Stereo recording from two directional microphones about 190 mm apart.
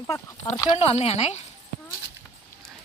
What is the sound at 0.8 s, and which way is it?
Speech, 30° left (ahead or behind).